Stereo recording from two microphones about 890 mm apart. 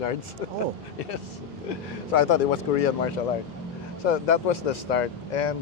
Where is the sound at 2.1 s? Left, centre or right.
Left.